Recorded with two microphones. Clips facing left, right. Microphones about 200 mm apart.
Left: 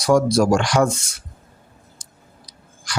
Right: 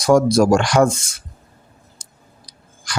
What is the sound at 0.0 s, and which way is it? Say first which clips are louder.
Speech: right 3 dB; 50° right (ahead or behind).